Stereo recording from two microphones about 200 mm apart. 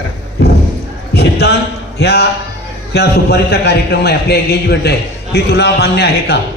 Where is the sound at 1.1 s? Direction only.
55° left (ahead or behind).